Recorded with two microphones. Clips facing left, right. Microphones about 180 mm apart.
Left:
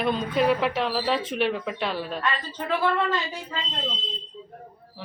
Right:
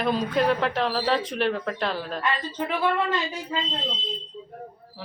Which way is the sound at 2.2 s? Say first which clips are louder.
Right 2 dB; 15° right (ahead or behind).